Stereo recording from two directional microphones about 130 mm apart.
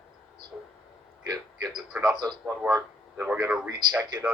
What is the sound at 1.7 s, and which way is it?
Speech, 5° right (ahead or behind).